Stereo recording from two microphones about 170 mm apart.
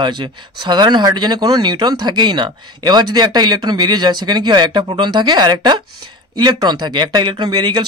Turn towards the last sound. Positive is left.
turn(degrees=-25)  # may be behind; listen again after turning